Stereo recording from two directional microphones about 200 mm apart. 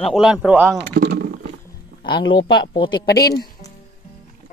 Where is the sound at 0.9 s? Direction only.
55° right (ahead or behind).